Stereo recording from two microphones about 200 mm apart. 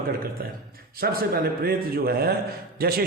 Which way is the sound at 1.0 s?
50° right (ahead or behind).